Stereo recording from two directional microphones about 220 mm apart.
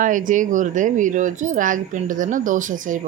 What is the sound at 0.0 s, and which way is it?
Speech, 35° right (ahead or behind).